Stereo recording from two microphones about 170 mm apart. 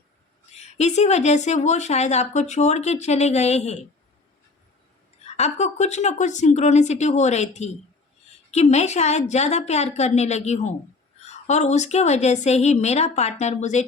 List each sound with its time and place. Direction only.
0.5 s speech: 40° left (ahead or behind)
5.2 s a woman's voice: 40° left (ahead or behind)
8.7 s speech: 40° left (ahead or behind)